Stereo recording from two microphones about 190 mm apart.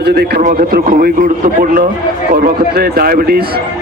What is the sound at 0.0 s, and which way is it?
Speech, 55° right (ahead or behind).